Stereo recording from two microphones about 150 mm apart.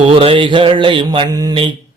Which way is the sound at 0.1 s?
35° right (ahead or behind).